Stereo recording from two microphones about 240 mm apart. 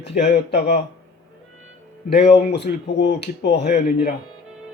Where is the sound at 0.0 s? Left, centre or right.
Left.